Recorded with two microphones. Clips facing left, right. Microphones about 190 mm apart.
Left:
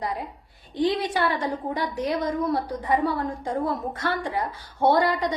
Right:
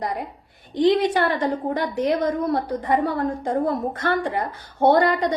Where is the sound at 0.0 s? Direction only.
60° right (ahead or behind).